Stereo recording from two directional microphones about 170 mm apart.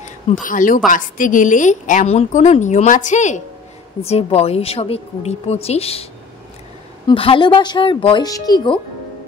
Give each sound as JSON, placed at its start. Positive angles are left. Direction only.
{"t": 0.4, "sound": "a woman's voice", "side_deg": 50}
{"t": 7.1, "sound": "speech", "side_deg": 30}